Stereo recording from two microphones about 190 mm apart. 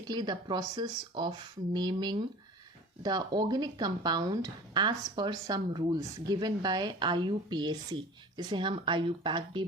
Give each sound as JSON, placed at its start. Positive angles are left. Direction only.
{"t": 0.1, "sound": "speech", "side_deg": -25}